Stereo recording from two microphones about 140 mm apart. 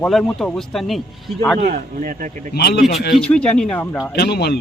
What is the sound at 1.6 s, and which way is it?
Speech, 80° right.